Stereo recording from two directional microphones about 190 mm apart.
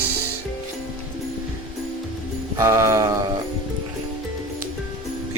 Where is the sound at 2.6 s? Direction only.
15° right (ahead or behind).